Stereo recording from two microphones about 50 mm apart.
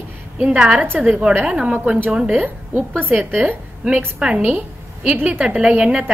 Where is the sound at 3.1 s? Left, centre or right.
Right.